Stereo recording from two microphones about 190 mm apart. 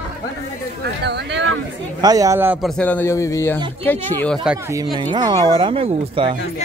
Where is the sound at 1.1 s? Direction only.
70° right (ahead or behind).